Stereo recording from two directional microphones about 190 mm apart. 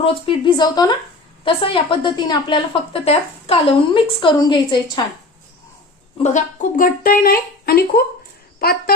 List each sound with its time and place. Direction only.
0.0 s a woman's voice: 25° left (ahead or behind)
6.2 s speech: 40° left (ahead or behind)